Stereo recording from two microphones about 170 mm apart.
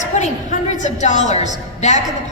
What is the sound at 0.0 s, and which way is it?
A woman's voice, 45° left (ahead or behind).